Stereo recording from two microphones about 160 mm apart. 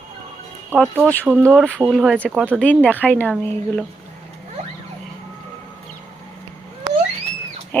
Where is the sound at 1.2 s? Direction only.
15° right (ahead or behind).